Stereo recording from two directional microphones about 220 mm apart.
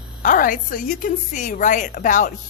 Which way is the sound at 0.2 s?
40° left (ahead or behind).